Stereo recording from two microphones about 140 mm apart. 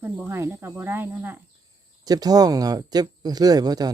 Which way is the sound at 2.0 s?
25° right (ahead or behind).